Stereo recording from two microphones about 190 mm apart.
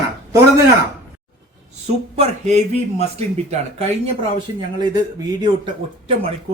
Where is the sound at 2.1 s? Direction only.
35° right (ahead or behind).